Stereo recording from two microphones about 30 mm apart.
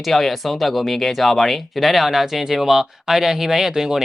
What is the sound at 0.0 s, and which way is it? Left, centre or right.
Speech, centre.